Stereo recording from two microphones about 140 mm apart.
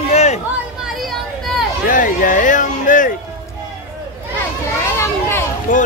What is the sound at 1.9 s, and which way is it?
Speech, 70° left (ahead or behind).